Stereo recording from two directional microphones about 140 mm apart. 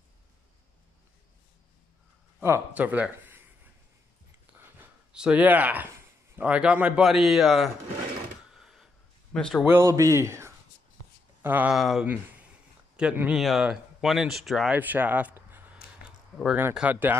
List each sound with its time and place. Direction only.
2.4 s speech: 15° right (ahead or behind)
4.5 s speech: 10° right (ahead or behind)
8.5 s a sound: centre (ahead or behind)
9.3 s speech: 5° left (ahead or behind)
9.7 s speech: 20° right (ahead or behind)
11.7 s speech: centre (ahead or behind)
14.8 s a sound: 10° right (ahead or behind)
16.7 s speech: 10° right (ahead or behind)